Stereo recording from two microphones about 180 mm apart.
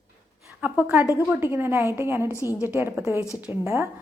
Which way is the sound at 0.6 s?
10° right (ahead or behind).